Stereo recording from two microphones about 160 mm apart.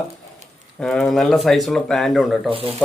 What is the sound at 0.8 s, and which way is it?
Speech, 5° left (ahead or behind).